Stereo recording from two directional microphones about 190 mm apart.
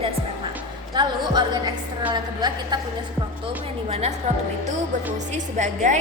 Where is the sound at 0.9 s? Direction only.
20° right (ahead or behind).